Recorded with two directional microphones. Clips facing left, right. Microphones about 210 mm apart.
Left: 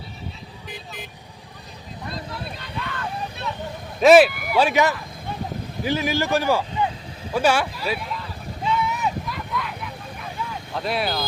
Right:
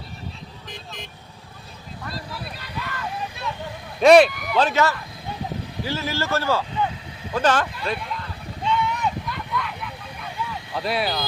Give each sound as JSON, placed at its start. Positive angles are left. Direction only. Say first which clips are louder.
{"t": 2.6, "sound": "vehicle", "louder": "left 1 dB", "side_deg": -5}
{"t": 4.0, "sound": "speech", "louder": "even", "side_deg": 5}
{"t": 7.3, "sound": "a sound", "louder": "left 1 dB", "side_deg": 10}
{"t": 10.8, "sound": "speech", "louder": "even", "side_deg": 0}